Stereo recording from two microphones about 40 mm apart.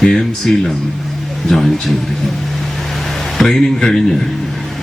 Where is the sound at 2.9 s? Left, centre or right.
Centre.